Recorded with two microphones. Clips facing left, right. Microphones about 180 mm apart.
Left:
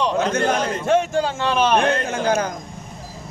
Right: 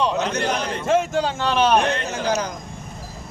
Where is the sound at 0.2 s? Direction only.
50° left (ahead or behind).